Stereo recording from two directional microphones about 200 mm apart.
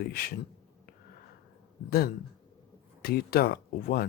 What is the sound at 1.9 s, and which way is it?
Speech, 50° left (ahead or behind).